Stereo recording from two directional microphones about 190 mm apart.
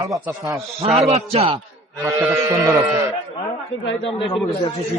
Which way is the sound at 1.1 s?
30° right (ahead or behind).